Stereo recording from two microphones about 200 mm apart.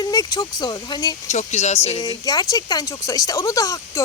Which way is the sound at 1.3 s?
35° left (ahead or behind).